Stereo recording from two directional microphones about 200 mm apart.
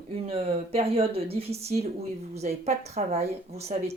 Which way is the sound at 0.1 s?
30° right (ahead or behind).